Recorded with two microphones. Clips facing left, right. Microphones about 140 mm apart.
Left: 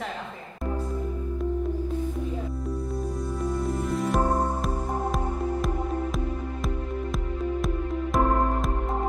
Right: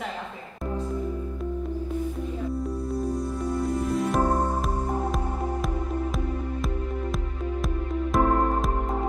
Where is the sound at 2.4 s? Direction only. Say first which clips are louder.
Right 3 dB; centre (ahead or behind).